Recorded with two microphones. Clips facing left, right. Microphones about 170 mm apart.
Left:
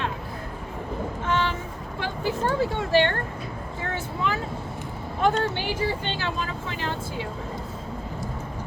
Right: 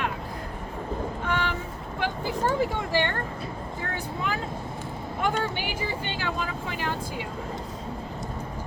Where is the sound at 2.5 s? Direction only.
15° right (ahead or behind).